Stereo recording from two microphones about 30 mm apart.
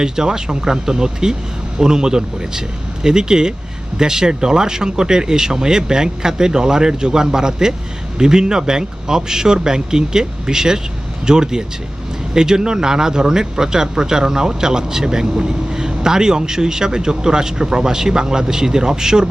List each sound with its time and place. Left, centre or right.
0.0 s speech: right